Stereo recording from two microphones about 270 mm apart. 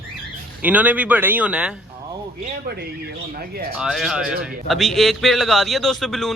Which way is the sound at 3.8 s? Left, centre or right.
Centre.